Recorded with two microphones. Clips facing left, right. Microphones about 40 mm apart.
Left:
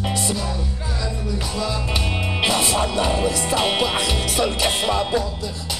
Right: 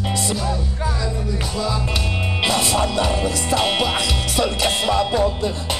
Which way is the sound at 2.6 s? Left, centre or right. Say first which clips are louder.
Right 1 dB; left.